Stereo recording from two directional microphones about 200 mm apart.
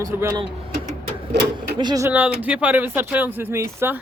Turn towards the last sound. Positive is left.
turn(degrees=-10)  # may be behind; listen again after turning